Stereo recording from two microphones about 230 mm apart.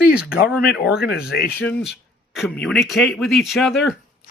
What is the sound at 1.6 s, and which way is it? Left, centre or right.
Speech, centre.